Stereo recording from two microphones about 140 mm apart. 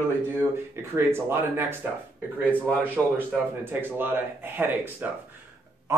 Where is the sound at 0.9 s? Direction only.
15° right (ahead or behind).